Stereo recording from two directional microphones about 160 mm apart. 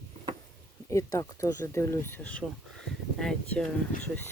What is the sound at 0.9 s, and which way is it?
Speech, 20° left (ahead or behind).